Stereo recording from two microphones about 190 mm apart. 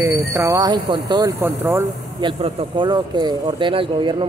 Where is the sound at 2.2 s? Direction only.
25° right (ahead or behind).